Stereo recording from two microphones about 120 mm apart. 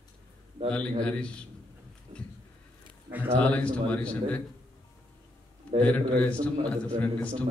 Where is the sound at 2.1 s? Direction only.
60° right (ahead or behind).